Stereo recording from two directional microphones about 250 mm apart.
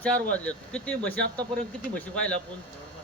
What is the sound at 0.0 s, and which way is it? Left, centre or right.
Speech, centre.